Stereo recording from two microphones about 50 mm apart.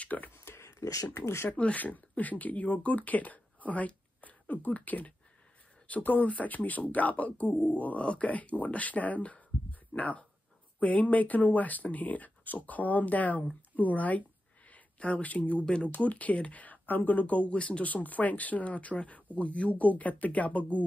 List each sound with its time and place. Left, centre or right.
0.0 s speech: left
0.3 s a sound: left
1.1 s speech: left
1.6 s speech: left
15.6 s speech: left